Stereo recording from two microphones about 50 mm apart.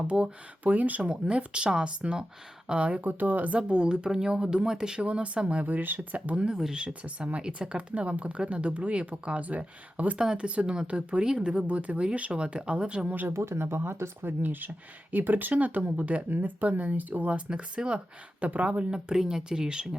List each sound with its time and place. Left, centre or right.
0.1 s speech: right
3.5 s speech: right
5.6 s speech: right
6.5 s speech: centre
6.8 s speech: right
13.2 s speech: right
18.9 s speech: centre